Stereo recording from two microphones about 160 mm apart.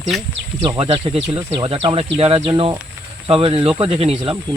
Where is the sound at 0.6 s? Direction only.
35° right (ahead or behind).